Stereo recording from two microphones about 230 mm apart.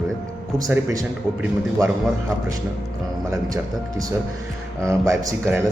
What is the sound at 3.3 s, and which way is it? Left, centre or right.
Speech, centre.